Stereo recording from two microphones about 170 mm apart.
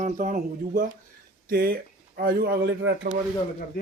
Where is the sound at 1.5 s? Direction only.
60° right (ahead or behind); by 3.1 s 85° right.